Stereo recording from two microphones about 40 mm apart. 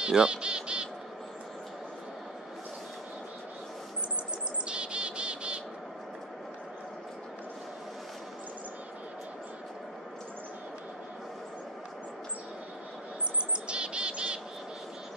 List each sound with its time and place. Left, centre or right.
0.0 s speech: right
4.6 s bird: right
13.7 s bird: right